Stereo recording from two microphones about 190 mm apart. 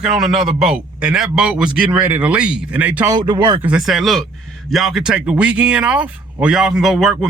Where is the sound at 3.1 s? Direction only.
20° right (ahead or behind).